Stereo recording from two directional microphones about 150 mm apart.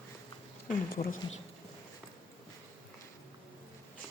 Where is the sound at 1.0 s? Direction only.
50° left (ahead or behind).